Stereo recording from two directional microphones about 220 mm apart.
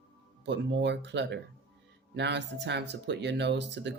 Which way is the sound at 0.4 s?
50° right (ahead or behind).